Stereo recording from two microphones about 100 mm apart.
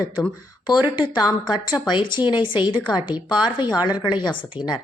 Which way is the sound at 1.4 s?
50° left (ahead or behind).